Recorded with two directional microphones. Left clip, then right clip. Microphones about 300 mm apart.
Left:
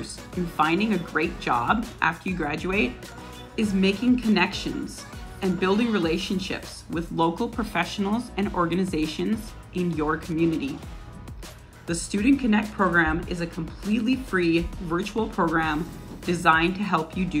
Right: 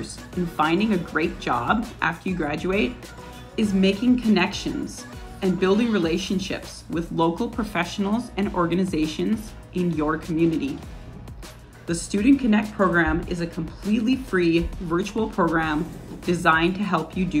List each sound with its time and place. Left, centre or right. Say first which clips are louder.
0.6 s speech: right 1 dB; centre
11.9 s speech: right 3 dB; centre